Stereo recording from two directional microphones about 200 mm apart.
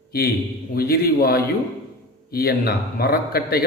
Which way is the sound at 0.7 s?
50° left (ahead or behind).